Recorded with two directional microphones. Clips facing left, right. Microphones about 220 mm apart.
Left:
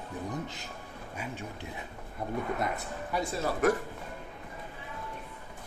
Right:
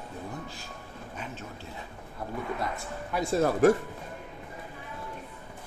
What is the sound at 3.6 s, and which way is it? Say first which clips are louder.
Speech: right 5 dB; 30° right (ahead or behind).